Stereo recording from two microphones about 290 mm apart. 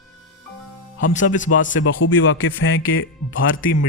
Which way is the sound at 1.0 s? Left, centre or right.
Left.